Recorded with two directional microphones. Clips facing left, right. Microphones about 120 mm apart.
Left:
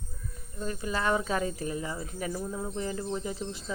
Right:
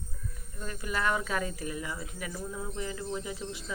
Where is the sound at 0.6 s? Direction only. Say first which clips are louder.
Left 2 dB; 25° left (ahead or behind).